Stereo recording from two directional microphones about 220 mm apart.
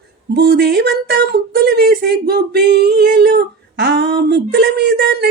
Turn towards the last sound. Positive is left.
turn(degrees=-50)  # may be behind; listen again after turning